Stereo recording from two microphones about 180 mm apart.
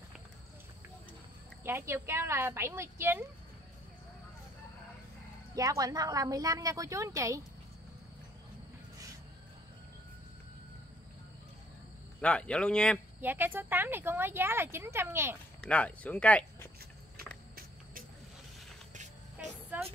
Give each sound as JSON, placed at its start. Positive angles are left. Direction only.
{"t": 1.6, "sound": "speech", "side_deg": -15}
{"t": 5.5, "sound": "a woman's voice", "side_deg": -20}
{"t": 12.2, "sound": "speech", "side_deg": 5}
{"t": 13.2, "sound": "speech", "side_deg": -10}
{"t": 15.7, "sound": "speech", "side_deg": 5}
{"t": 19.3, "sound": "vehicle", "side_deg": -10}